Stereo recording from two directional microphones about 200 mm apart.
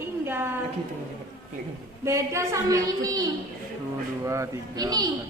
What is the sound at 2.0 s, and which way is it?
A woman's voice, 15° right (ahead or behind).